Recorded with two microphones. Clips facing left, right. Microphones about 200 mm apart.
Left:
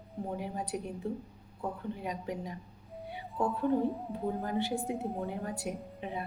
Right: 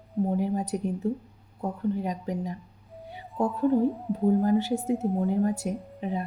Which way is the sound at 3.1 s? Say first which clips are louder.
Right 5 dB; 40° right (ahead or behind).